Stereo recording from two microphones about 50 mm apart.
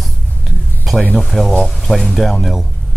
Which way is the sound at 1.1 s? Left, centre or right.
Centre.